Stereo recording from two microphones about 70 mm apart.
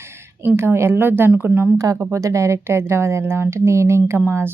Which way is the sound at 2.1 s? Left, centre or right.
Right.